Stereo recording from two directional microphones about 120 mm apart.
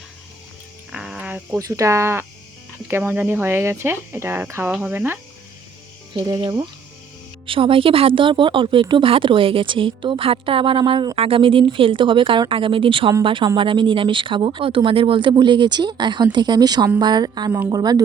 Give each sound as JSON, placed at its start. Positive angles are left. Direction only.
{"t": 0.9, "sound": "a sound", "side_deg": -5}
{"t": 1.5, "sound": "speech", "side_deg": -30}
{"t": 6.1, "sound": "speech", "side_deg": -30}
{"t": 7.4, "sound": "speech", "side_deg": -50}